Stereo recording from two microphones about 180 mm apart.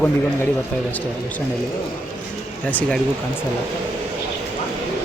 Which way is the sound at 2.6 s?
10° left (ahead or behind).